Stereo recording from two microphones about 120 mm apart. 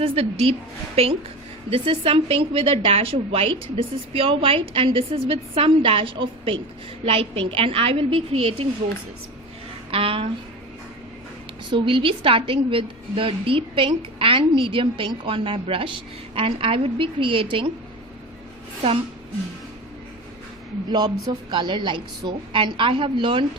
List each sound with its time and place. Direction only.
0.0 s a woman's voice: 55° right (ahead or behind)
9.9 s a woman's voice: 50° right (ahead or behind)
11.7 s a woman's voice: 45° right (ahead or behind)
21.5 s a woman's voice: 40° right (ahead or behind)